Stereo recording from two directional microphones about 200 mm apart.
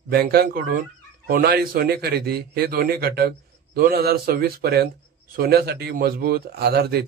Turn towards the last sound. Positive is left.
turn(degrees=-55)  # may be behind; listen again after turning